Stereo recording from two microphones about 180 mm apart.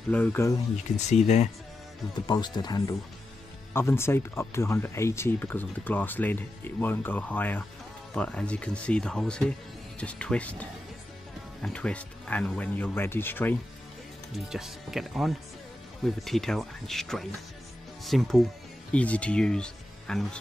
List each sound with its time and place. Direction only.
0.1 s speech: 10° left (ahead or behind)
0.9 s speech: 40° left (ahead or behind)
2.1 s speech: 25° left (ahead or behind)
14.3 s speech: centre (ahead or behind)